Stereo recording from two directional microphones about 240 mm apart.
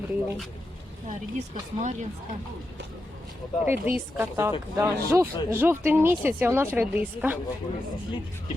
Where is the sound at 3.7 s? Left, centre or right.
Centre.